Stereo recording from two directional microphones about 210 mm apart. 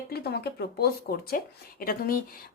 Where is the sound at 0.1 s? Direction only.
50° left (ahead or behind).